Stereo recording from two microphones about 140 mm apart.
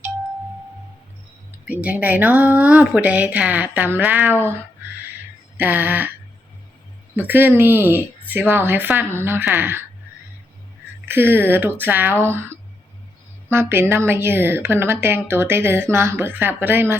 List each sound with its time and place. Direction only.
1.6 s a woman's voice: 10° right (ahead or behind)
5.5 s a woman's voice: 15° right (ahead or behind)
7.2 s a woman's voice: 15° right (ahead or behind)
11.1 s a woman's voice: 15° right (ahead or behind)